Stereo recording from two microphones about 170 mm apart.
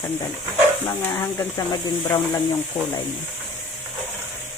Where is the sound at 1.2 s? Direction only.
20° left (ahead or behind).